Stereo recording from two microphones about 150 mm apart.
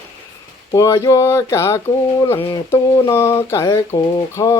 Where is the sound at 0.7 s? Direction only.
20° left (ahead or behind).